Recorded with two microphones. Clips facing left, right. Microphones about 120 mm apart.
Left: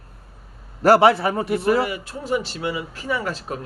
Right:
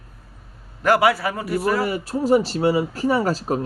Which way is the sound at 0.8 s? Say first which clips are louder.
Left 3 dB; 30° left (ahead or behind).